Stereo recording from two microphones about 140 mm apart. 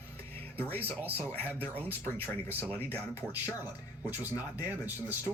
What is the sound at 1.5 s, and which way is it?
Speech, 10° left (ahead or behind).